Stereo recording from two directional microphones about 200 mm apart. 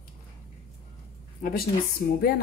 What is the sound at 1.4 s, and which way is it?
Speech, 50° left (ahead or behind).